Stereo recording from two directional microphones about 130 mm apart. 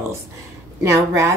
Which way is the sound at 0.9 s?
20° right (ahead or behind).